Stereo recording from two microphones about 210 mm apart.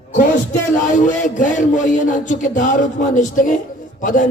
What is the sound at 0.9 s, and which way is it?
Speech, 40° left (ahead or behind).